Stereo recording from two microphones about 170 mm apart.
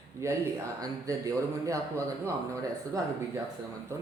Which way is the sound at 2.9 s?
20° right (ahead or behind).